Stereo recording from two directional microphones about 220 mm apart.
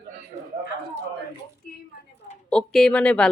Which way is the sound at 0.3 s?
30° right (ahead or behind).